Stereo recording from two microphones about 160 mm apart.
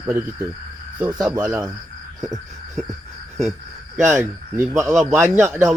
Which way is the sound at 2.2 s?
20° right (ahead or behind).